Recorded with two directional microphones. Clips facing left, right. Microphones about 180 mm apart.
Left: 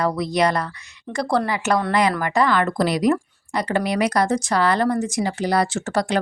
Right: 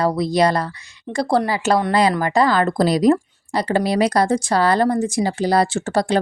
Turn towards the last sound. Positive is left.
turn(degrees=-30)  # may be behind; listen again after turning